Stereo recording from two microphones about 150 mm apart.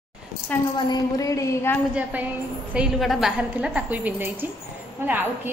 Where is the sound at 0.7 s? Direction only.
25° left (ahead or behind).